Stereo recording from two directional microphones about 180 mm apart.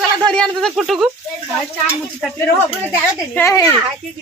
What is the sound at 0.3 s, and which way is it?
Speech, centre (ahead or behind).